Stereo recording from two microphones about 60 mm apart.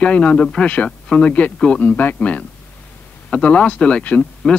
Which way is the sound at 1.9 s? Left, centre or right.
Left.